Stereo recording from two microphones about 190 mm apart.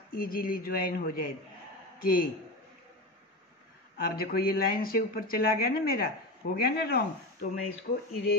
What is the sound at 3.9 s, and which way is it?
A woman's voice, 55° left (ahead or behind).